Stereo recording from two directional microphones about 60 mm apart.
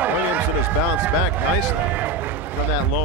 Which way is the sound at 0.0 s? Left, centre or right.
Right.